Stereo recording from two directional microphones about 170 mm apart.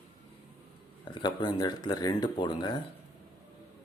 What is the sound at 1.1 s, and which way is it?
Speech, 25° left (ahead or behind).